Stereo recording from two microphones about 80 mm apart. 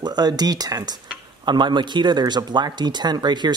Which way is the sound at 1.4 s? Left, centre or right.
Right.